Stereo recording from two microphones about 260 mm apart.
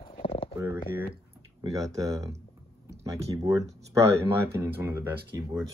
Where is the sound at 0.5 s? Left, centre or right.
Centre.